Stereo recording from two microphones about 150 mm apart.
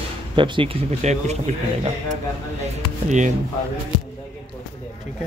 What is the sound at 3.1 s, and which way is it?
Speech, 55° right (ahead or behind).